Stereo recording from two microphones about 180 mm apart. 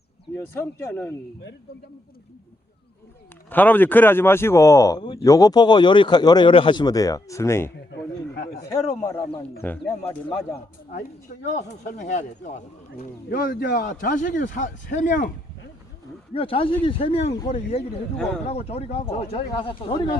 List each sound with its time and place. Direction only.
0.3 s speech: 15° left (ahead or behind)
3.5 s speech: 10° left (ahead or behind)
8.7 s speech: 15° left (ahead or behind)
11.5 s speech: 40° left (ahead or behind)
16.3 s speech: 30° left (ahead or behind)
18.2 s speech: 5° left (ahead or behind)
18.4 s speech: 35° left (ahead or behind)